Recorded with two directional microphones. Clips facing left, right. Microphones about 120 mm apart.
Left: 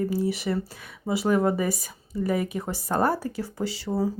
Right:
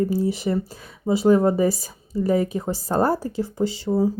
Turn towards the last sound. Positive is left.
turn(degrees=-20)  # may be behind; listen again after turning